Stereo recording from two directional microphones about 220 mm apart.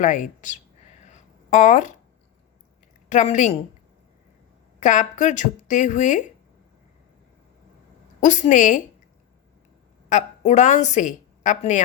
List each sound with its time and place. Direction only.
0.0 s a woman's voice: 35° left (ahead or behind)
1.0 s a sound: 35° left (ahead or behind)
3.1 s a woman's voice: 35° left (ahead or behind)
4.8 s a woman's voice: 35° left (ahead or behind)
8.2 s a woman's voice: 35° left (ahead or behind)
10.1 s a woman's voice: 30° left (ahead or behind)